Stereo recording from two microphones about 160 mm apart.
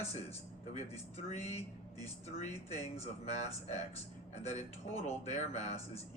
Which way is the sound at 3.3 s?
45° left (ahead or behind).